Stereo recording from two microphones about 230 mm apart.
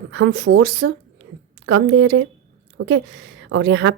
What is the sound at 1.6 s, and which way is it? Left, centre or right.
A woman's voice, right.